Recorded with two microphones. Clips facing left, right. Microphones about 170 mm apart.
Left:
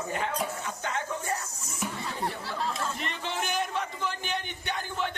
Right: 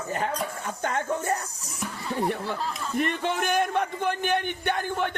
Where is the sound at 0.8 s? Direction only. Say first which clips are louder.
Right 7 dB; 55° right (ahead or behind).